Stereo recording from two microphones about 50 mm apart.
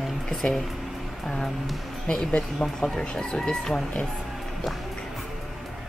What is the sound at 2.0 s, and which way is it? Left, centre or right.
A woman's voice, centre.